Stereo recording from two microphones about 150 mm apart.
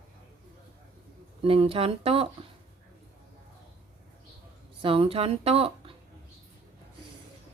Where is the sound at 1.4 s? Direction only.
40° right (ahead or behind).